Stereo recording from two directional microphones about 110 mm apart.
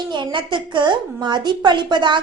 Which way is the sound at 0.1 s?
45° right (ahead or behind).